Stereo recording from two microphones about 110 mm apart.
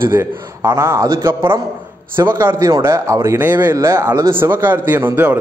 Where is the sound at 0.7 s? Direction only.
25° right (ahead or behind).